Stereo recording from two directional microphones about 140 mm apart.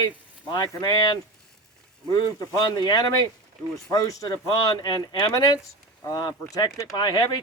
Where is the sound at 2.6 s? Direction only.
30° left (ahead or behind).